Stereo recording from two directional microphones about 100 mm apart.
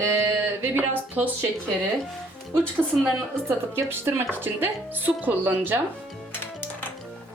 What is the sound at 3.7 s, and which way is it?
Speech, 25° right (ahead or behind).